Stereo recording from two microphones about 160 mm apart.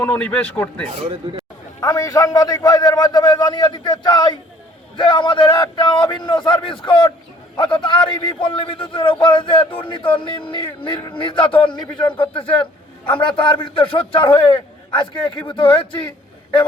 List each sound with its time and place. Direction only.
0.0 s speech: 10° left (ahead or behind)
1.8 s a man's voice: 20° left (ahead or behind)